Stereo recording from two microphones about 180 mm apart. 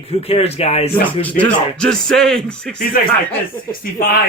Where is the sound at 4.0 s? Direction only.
55° left (ahead or behind).